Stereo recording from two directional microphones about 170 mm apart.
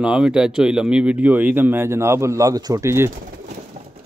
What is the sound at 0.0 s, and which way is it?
Speech, 5° right (ahead or behind).